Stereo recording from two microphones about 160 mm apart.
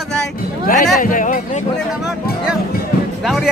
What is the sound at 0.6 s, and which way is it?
Speech, 55° left (ahead or behind).